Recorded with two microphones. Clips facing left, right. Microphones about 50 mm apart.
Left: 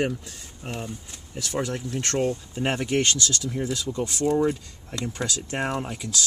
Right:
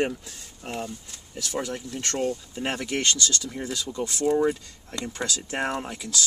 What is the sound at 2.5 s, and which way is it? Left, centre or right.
Speech, centre.